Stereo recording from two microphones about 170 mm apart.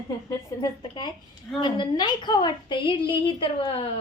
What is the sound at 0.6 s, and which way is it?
A woman's voice, 25° left (ahead or behind).